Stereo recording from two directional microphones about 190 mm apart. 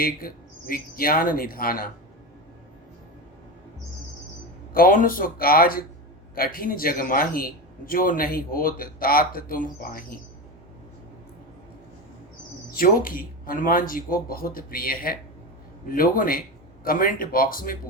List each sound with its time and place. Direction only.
0.0 s a man's voice: 50° left (ahead or behind)
4.7 s a man's voice: 50° left (ahead or behind)
12.7 s a man's voice: 50° left (ahead or behind)